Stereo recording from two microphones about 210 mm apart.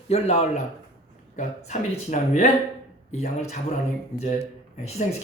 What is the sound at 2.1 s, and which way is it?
Speech, 35° left (ahead or behind).